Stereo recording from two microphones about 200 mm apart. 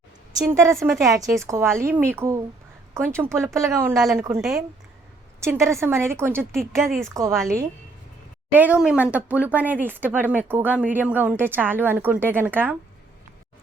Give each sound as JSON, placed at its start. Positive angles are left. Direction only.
{"t": 0.3, "sound": "speech", "side_deg": -15}
{"t": 4.4, "sound": "speech", "side_deg": 0}
{"t": 5.4, "sound": "speech", "side_deg": -15}
{"t": 6.5, "sound": "speech", "side_deg": 0}
{"t": 7.1, "sound": "speech", "side_deg": -15}
{"t": 8.5, "sound": "speech", "side_deg": -5}